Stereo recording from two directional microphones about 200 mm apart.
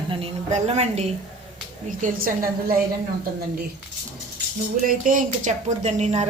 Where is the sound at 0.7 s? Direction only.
30° right (ahead or behind).